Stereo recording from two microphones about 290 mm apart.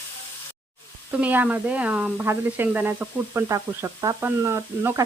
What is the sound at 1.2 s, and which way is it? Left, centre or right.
Speech, centre.